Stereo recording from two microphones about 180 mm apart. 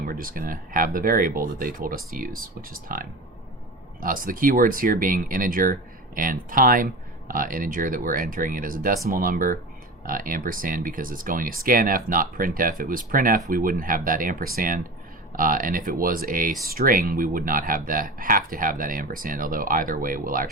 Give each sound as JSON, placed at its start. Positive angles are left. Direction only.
{"t": 0.0, "sound": "speech", "side_deg": -50}